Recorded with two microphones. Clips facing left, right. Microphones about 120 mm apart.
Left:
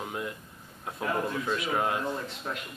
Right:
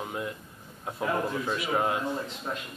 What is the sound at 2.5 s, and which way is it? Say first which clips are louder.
Speech: right 1 dB; 20° right (ahead or behind).